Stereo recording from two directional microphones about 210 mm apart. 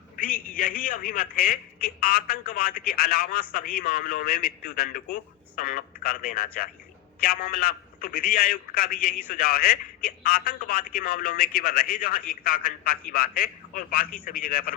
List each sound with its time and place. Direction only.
0.9 s a man's voice: 40° left (ahead or behind)